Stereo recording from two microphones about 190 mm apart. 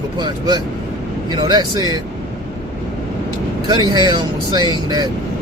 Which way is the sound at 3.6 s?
20° right (ahead or behind).